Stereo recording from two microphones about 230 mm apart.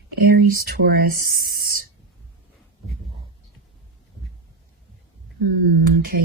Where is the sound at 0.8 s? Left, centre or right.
Right.